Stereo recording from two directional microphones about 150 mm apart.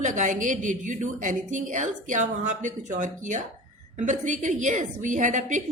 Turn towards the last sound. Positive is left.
turn(degrees=-55)  # may be behind; listen again after turning